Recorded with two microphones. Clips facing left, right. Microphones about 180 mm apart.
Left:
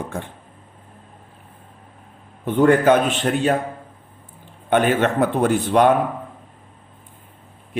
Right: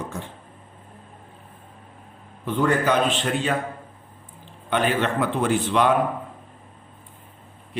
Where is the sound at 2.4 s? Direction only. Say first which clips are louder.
Left 7 dB; 55° left (ahead or behind).